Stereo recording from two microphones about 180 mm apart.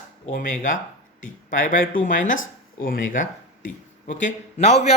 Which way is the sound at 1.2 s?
45° left (ahead or behind).